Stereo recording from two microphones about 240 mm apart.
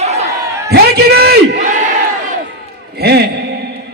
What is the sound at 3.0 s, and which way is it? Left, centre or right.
Speech, right.